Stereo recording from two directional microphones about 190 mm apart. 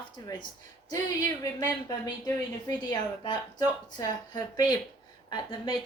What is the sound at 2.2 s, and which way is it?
Speech, 20° left (ahead or behind).